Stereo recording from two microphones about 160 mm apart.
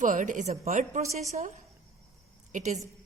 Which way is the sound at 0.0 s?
50° right (ahead or behind).